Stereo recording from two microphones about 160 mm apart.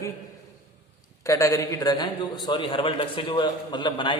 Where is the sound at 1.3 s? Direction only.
20° left (ahead or behind).